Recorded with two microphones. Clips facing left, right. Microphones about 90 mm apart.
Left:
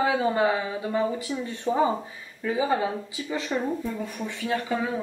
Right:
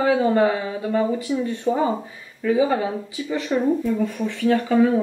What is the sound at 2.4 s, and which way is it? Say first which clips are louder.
Speech: right 6 dB; 20° left (ahead or behind).